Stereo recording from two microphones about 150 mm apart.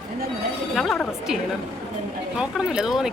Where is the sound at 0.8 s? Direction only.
5° left (ahead or behind).